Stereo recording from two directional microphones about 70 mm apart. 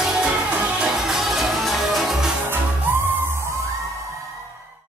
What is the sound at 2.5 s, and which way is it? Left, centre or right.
Music, right.